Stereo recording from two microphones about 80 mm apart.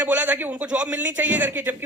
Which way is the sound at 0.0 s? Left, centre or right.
Centre.